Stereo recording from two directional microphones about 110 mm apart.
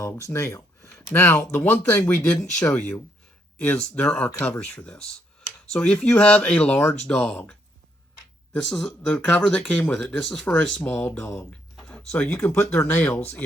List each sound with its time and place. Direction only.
0.3 s speech: 25° left (ahead or behind)
8.5 s speech: 5° left (ahead or behind)
10.8 s speech: 20° left (ahead or behind)
11.8 s speech: 10° left (ahead or behind)